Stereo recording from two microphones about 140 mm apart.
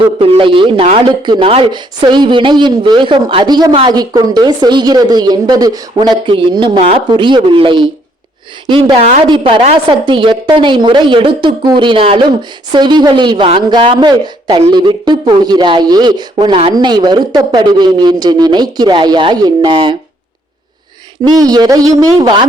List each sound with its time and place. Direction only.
0.0 s a man's voice: 40° right (ahead or behind)
21.2 s a woman's voice: 30° right (ahead or behind)